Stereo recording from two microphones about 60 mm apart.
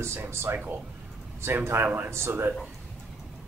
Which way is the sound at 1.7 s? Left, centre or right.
Right.